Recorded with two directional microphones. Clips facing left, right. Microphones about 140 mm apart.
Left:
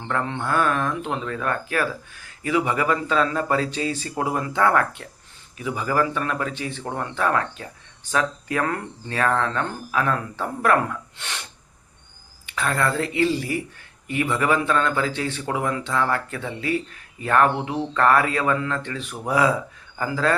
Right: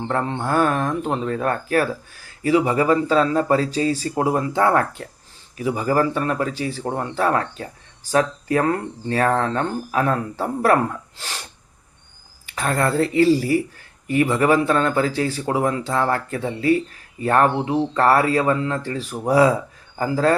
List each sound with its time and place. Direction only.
0.1 s speech: 35° right (ahead or behind)
12.5 s speech: 40° right (ahead or behind)